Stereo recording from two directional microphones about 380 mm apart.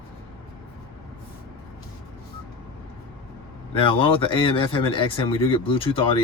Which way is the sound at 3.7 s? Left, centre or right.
Centre.